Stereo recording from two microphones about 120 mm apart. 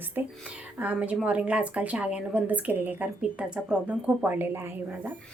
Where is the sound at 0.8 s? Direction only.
10° right (ahead or behind).